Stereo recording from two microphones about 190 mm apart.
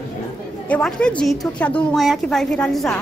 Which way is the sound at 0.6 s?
5° left (ahead or behind).